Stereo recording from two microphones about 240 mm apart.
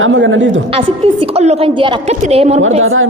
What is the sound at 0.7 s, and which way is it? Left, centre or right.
A woman's voice, right.